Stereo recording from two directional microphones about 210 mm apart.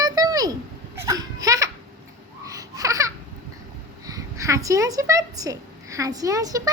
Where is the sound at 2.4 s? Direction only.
15° right (ahead or behind).